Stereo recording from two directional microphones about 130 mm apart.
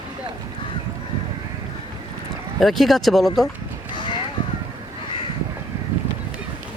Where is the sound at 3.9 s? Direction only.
35° left (ahead or behind).